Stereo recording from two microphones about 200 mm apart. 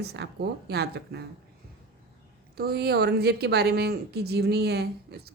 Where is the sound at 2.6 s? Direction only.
50° right (ahead or behind).